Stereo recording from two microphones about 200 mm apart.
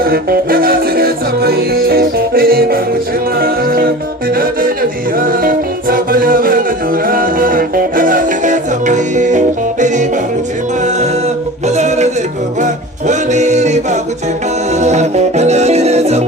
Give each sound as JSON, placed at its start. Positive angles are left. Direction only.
{"t": 0.0, "sound": "music", "side_deg": -50}
{"t": 5.1, "sound": "music", "side_deg": -45}
{"t": 11.6, "sound": "music", "side_deg": -35}